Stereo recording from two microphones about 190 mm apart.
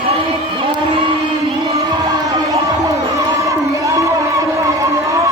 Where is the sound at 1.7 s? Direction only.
20° right (ahead or behind).